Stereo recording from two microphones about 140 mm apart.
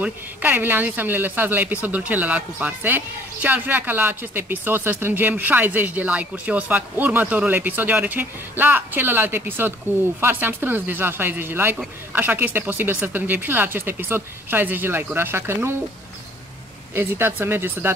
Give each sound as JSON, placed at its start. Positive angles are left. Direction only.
{"t": 0.0, "sound": "speech", "side_deg": -10}
{"t": 16.9, "sound": "speech", "side_deg": -15}